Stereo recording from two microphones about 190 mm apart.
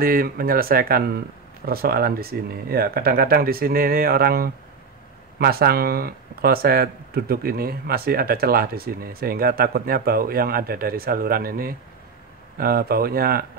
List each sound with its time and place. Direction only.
0.0 s speech: 50° right (ahead or behind)